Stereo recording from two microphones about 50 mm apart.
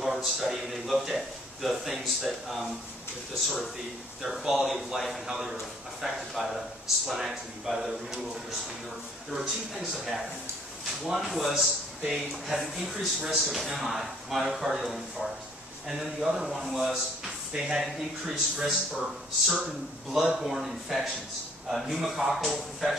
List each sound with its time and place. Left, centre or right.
0.0 s a man's voice: centre
17.5 s speech: centre
17.7 s a man's voice: centre